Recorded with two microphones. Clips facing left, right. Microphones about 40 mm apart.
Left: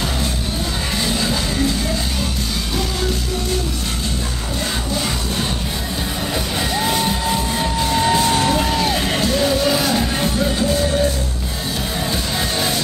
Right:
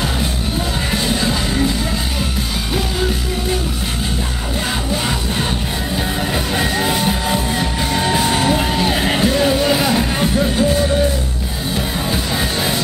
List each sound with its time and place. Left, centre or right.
6.3 s music: centre
12.4 s music: centre